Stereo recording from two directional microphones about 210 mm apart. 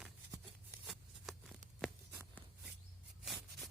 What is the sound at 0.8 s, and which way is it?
Shuffling cards, centre (ahead or behind).